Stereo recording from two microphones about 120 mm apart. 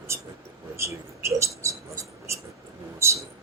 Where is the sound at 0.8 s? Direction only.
25° right (ahead or behind).